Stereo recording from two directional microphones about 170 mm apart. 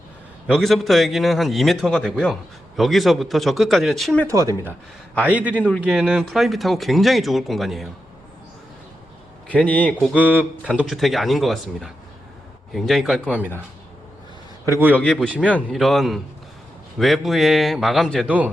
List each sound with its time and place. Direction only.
0.4 s speech: centre (ahead or behind)
4.3 s speech: 20° right (ahead or behind)
5.5 s a man's voice: 5° left (ahead or behind)
5.8 s speech: 5° right (ahead or behind)
9.5 s a man's voice: 10° left (ahead or behind)
10.1 s speech: 10° right (ahead or behind)
14.9 s a man's voice: 5° left (ahead or behind); by 18.5 s 10° right (ahead or behind)